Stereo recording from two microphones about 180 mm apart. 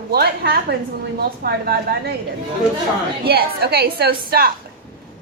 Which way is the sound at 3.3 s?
60° right (ahead or behind).